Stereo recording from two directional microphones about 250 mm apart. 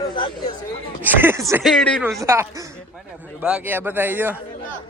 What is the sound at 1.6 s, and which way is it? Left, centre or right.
Speech, centre.